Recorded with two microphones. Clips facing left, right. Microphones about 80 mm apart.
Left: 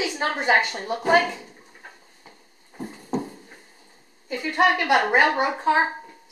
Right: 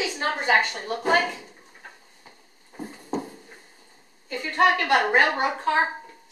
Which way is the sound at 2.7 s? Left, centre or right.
Centre.